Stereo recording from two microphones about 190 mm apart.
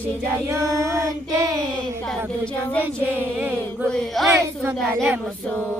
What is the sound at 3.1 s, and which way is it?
Child singing, 10° right (ahead or behind).